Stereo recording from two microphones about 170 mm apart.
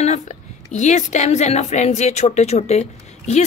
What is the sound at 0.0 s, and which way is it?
Speech, 45° left (ahead or behind).